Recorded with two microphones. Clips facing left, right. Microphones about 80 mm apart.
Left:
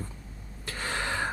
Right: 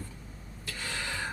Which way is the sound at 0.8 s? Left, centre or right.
Left.